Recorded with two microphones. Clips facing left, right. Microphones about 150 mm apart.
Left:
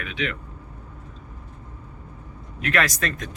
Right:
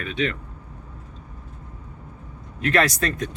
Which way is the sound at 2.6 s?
30° right (ahead or behind).